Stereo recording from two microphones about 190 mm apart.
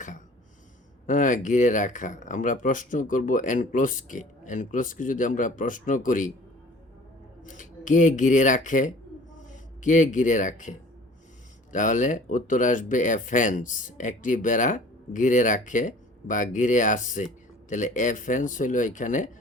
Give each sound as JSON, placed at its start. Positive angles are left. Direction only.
{"t": 1.0, "sound": "speech", "side_deg": 45}
{"t": 7.4, "sound": "speech", "side_deg": 40}